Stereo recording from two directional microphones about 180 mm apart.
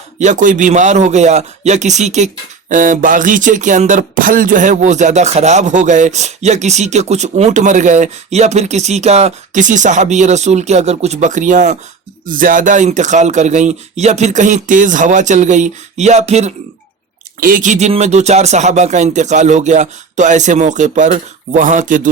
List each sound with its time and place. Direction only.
0.2 s speech: 45° right (ahead or behind)